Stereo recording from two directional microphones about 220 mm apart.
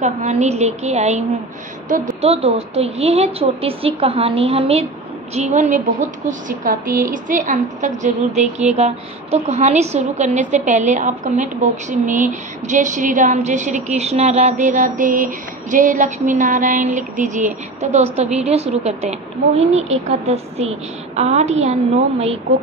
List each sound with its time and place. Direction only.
0.0 s a woman's voice: 30° right (ahead or behind)